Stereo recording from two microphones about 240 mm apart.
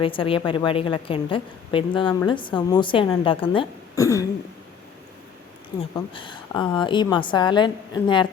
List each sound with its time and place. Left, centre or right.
0.0 s a woman's voice: left
6.1 s a woman's voice: centre